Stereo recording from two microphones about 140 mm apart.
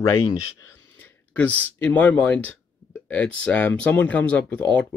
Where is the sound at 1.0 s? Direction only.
10° left (ahead or behind).